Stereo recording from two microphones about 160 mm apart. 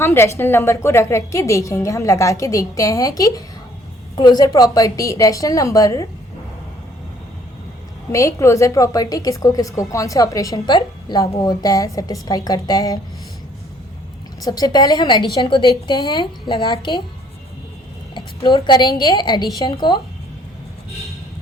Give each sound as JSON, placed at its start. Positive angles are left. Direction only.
{"t": 0.0, "sound": "a woman's voice", "side_deg": 15}
{"t": 8.1, "sound": "a woman's voice", "side_deg": 20}
{"t": 14.4, "sound": "a woman's voice", "side_deg": 25}
{"t": 18.1, "sound": "a woman's voice", "side_deg": 25}